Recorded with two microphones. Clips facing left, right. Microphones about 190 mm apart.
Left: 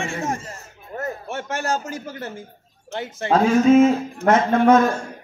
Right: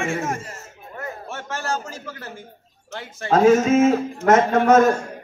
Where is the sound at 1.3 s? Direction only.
20° left (ahead or behind).